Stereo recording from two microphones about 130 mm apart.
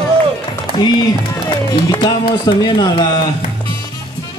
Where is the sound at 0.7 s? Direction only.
35° right (ahead or behind).